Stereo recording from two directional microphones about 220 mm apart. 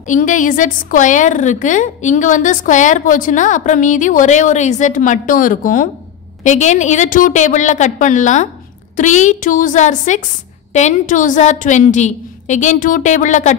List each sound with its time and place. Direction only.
0.1 s a woman's voice: 35° left (ahead or behind)